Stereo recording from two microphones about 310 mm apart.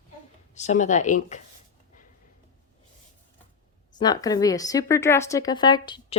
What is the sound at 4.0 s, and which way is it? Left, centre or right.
A woman's voice, centre.